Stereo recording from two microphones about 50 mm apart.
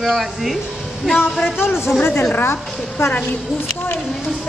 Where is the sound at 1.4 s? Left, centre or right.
Left.